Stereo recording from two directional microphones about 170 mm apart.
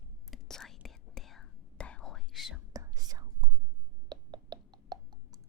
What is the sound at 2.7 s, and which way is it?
Whispering, 20° right (ahead or behind).